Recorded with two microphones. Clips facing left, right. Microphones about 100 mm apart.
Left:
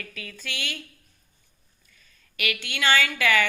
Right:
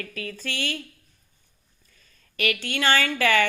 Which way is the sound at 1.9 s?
35° right (ahead or behind).